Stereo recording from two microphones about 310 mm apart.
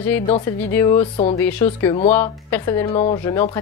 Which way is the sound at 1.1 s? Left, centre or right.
Left.